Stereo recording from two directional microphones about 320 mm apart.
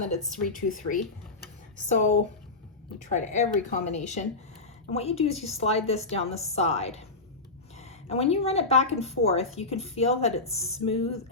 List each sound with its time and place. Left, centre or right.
0.4 s speech: left